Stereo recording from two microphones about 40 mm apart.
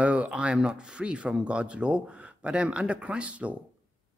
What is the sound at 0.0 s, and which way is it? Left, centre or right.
Speech, right.